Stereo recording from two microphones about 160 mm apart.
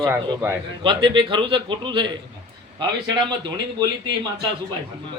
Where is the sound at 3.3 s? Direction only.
30° right (ahead or behind).